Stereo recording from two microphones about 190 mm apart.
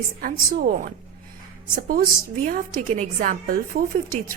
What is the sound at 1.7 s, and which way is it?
A woman's voice, 45° right (ahead or behind).